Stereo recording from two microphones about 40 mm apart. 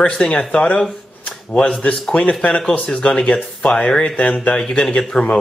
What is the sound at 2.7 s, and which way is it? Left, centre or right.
Speech, left.